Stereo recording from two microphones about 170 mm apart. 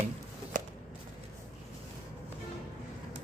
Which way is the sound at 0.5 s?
55° right (ahead or behind).